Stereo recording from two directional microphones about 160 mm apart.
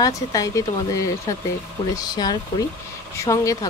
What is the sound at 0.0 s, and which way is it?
Speech, 20° left (ahead or behind).